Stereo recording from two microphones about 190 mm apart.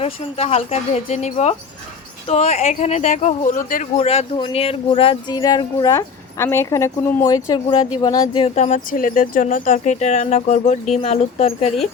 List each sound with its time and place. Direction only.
0.0 s speech: 30° left (ahead or behind)